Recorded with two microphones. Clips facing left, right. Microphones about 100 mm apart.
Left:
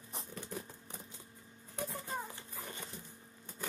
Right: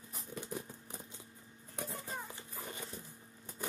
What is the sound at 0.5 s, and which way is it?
Vehicle, 15° right (ahead or behind).